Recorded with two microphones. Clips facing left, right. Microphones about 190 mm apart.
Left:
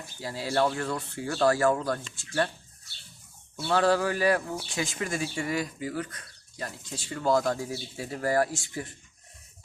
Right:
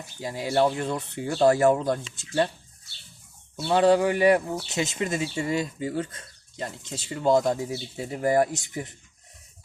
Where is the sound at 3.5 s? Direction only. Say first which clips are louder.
Right 4 dB; 20° right (ahead or behind).